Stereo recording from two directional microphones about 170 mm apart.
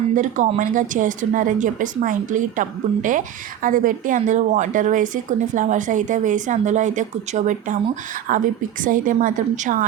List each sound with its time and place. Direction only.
0.6 s a woman's voice: 50° right (ahead or behind)